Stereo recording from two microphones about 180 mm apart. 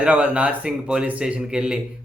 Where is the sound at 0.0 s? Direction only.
5° right (ahead or behind).